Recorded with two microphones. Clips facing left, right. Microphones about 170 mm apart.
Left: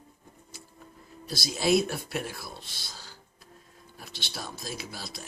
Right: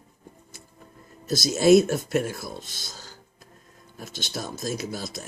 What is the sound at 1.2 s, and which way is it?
Speech, 45° right (ahead or behind).